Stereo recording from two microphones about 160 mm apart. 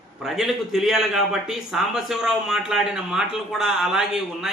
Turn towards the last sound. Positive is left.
turn(degrees=-5)  # may be behind; listen again after turning